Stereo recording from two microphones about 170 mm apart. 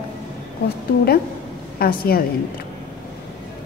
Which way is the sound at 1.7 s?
60° left (ahead or behind).